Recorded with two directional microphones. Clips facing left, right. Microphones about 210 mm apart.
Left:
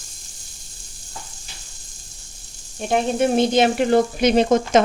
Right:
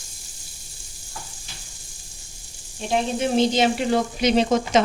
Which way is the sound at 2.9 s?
55° left (ahead or behind).